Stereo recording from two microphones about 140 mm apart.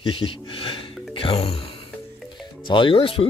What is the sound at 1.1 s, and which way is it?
Music, 40° left (ahead or behind).